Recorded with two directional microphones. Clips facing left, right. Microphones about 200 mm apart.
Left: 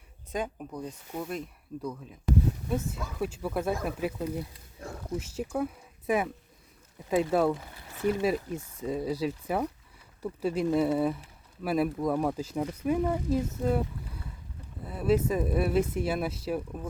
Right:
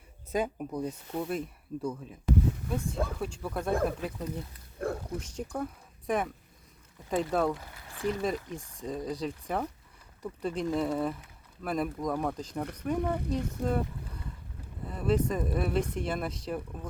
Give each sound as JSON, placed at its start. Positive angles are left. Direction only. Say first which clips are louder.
{"t": 0.3, "sound": "speech", "louder": "right 3 dB", "side_deg": -5}
{"t": 4.8, "sound": "roaring cats", "louder": "right 9 dB", "side_deg": -60}
{"t": 5.1, "sound": "speech", "louder": "left 4 dB", "side_deg": 5}
{"t": 13.7, "sound": "boat", "louder": "left 2 dB", "side_deg": 5}
{"t": 14.8, "sound": "speech", "louder": "left 2 dB", "side_deg": 5}